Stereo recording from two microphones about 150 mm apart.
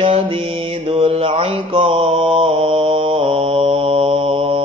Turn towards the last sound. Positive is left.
turn(degrees=-35)  # may be behind; listen again after turning